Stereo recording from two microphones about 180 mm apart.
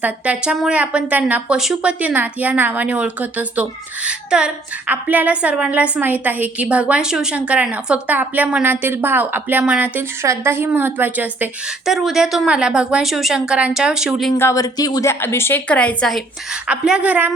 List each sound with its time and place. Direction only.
0.0 s a woman's voice: 5° right (ahead or behind)
14.3 s a woman's voice: 15° left (ahead or behind); by 17.3 s 10° right (ahead or behind)